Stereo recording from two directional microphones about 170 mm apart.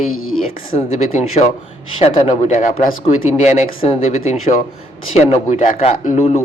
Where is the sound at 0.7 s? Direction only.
40° left (ahead or behind).